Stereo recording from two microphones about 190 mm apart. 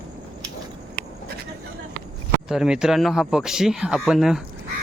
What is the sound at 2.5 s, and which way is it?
Speech, 5° right (ahead or behind).